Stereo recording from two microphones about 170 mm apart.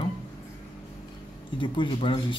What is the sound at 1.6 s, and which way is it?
Speech, 30° left (ahead or behind).